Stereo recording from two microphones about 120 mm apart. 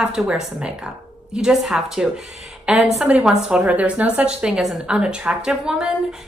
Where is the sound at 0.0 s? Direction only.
10° right (ahead or behind).